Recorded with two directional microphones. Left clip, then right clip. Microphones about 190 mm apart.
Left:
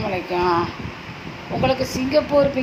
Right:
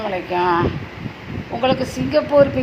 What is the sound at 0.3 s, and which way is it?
Speech, 10° right (ahead or behind).